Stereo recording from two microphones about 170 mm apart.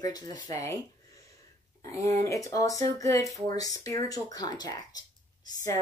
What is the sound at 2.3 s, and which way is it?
Speech, 20° left (ahead or behind).